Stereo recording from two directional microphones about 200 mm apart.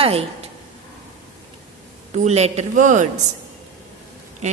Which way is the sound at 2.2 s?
35° right (ahead or behind).